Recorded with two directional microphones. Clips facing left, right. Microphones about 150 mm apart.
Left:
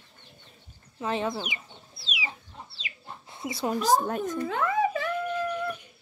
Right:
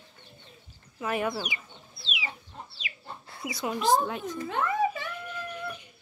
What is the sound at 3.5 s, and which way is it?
Speech, 40° left (ahead or behind).